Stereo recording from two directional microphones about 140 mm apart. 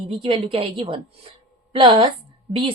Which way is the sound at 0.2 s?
40° right (ahead or behind).